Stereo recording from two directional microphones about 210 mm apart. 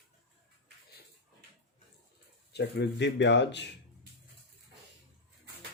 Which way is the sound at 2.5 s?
50° left (ahead or behind).